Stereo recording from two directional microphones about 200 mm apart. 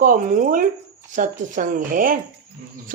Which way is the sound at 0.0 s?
45° right (ahead or behind).